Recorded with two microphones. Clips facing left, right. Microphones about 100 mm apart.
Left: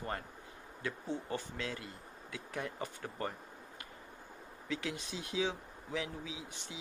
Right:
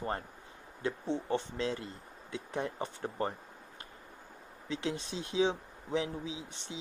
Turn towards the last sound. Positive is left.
turn(degrees=-30)  # may be behind; listen again after turning